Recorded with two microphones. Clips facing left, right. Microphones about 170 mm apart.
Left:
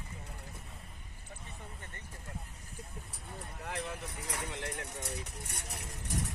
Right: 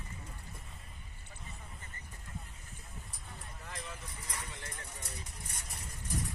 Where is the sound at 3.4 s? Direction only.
65° left (ahead or behind).